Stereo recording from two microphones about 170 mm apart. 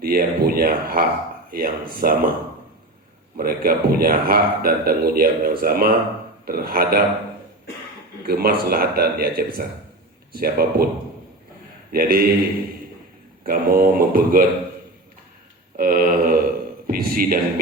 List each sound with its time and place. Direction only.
0.0 s a man's voice: 60° right (ahead or behind)
3.3 s a man's voice: 60° right (ahead or behind)
8.3 s a man's voice: 65° right (ahead or behind)
11.9 s a man's voice: 60° right (ahead or behind)
13.4 s a man's voice: 55° right (ahead or behind)
15.8 s a sound: 55° right (ahead or behind)